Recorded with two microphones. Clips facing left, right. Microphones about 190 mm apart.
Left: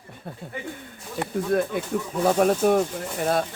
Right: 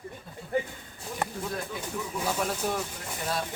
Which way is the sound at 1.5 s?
55° left (ahead or behind).